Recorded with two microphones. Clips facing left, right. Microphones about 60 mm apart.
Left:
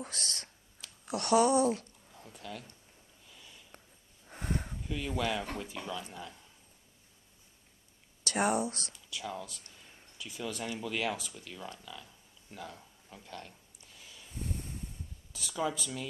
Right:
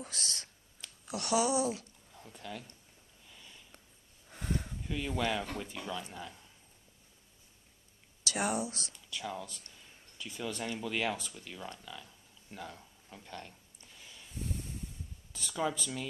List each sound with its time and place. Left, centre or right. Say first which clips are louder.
0.0 s speech: left 1 dB; left
0.7 s a sound: left 1 dB; centre
1.1 s speech: left 4 dB; left
2.0 s a sound: right 1 dB; centre
3.3 s sniff: even; centre
4.3 s a sound: left 1 dB; centre
4.8 s speech: even; centre
8.4 s speech: left 4 dB; centre
8.6 s speech: left 3 dB; left
8.9 s speech: even; centre
11.8 s a sound: even; centre
15.3 s speech: even; centre